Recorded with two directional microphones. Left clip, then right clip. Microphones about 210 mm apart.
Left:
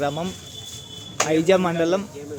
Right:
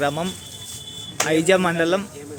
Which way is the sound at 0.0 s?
5° right (ahead or behind).